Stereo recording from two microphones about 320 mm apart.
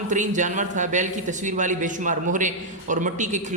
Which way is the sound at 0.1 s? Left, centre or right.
Right.